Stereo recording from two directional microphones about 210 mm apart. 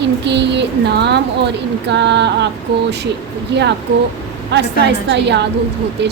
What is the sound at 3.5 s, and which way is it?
Speech, 55° right (ahead or behind).